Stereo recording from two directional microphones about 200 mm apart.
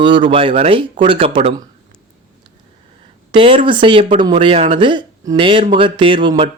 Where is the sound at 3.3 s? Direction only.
25° right (ahead or behind).